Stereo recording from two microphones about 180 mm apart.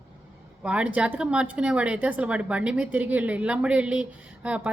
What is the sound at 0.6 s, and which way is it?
A woman's voice, 5° right (ahead or behind).